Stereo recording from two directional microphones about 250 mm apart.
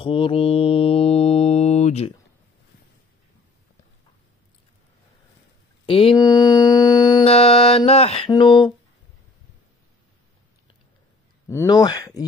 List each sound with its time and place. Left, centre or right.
0.0 s mantra: left
5.9 s mantra: left
11.4 s speech: centre